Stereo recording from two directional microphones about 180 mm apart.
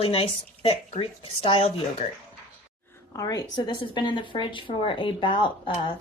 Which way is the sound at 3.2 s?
20° left (ahead or behind).